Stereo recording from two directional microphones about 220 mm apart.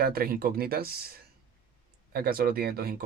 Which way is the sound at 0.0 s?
45° right (ahead or behind).